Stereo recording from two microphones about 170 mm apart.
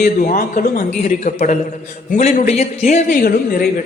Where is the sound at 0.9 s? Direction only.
45° left (ahead or behind).